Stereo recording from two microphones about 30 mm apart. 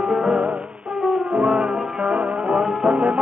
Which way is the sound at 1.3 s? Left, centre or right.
Right.